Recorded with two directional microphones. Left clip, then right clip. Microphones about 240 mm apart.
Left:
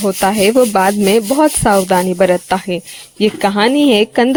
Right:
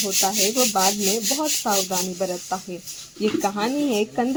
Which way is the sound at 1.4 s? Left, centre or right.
Left.